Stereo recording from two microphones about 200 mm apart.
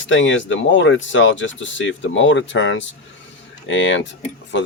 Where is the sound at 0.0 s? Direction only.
70° left (ahead or behind).